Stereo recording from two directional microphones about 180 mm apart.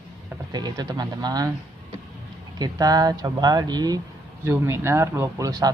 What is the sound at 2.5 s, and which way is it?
Speech, 20° right (ahead or behind).